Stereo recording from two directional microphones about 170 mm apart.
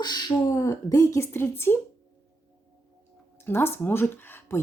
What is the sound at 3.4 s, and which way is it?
Speech, 15° left (ahead or behind).